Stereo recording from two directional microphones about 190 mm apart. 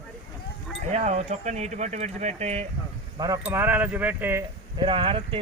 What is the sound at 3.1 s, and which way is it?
Speech, 20° right (ahead or behind).